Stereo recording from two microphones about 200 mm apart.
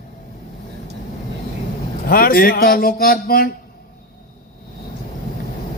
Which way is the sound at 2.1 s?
45° left (ahead or behind).